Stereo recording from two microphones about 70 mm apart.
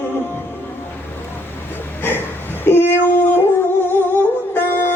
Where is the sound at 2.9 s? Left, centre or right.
Left.